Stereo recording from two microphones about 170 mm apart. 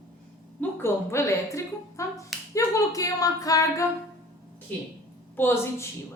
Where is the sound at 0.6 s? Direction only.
15° left (ahead or behind).